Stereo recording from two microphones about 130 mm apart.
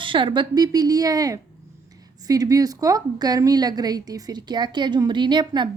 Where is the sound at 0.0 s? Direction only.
40° right (ahead or behind).